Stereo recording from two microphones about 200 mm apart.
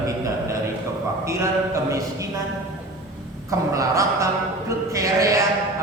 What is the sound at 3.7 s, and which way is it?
A man's voice, 15° right (ahead or behind).